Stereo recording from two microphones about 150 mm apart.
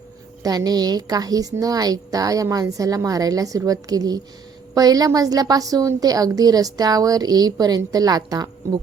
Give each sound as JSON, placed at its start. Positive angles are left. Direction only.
{"t": 0.4, "sound": "a woman's voice", "side_deg": -25}